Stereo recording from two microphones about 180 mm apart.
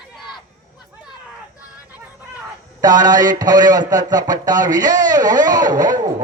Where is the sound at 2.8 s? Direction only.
20° right (ahead or behind).